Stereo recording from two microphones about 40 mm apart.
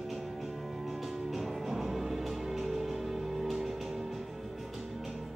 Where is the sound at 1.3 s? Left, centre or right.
Centre.